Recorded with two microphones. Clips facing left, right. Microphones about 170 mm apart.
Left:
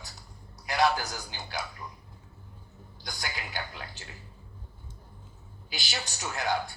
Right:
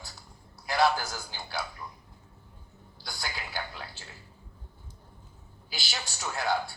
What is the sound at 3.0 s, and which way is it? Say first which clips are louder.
Speech: even; 15° left (ahead or behind).